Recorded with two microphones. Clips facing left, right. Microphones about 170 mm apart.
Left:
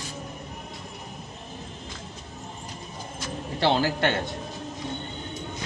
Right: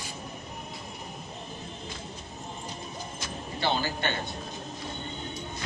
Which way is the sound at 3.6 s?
90° left.